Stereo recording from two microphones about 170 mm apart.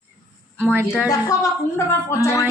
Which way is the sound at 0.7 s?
5° right (ahead or behind).